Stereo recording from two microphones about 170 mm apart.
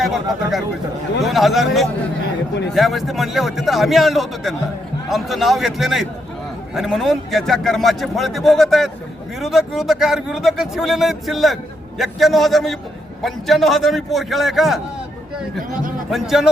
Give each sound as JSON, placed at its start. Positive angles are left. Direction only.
{"t": 1.2, "sound": "a man's voice", "side_deg": 0}
{"t": 15.7, "sound": "a man's voice", "side_deg": -55}
{"t": 16.0, "sound": "a man's voice", "side_deg": 0}